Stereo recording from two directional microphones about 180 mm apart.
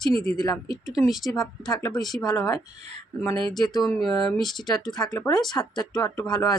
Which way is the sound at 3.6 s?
20° left (ahead or behind).